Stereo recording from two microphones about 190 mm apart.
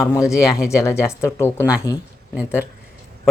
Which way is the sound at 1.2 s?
10° left (ahead or behind).